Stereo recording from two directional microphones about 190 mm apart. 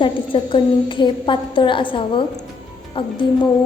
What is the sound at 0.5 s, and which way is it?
A woman's voice, 25° left (ahead or behind).